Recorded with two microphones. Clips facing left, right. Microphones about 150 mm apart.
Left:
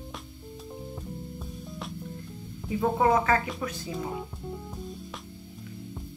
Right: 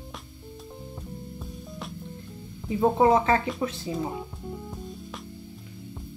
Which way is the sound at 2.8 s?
25° right (ahead or behind).